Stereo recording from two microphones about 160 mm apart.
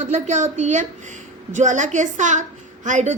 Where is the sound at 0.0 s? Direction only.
50° right (ahead or behind).